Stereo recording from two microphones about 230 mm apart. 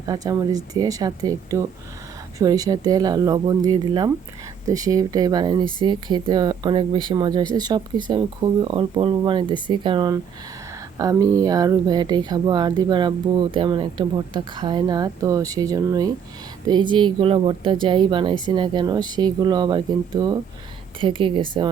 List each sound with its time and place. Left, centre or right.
0.0 s speech: centre